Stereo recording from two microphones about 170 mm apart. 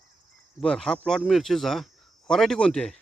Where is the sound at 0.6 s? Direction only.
5° left (ahead or behind).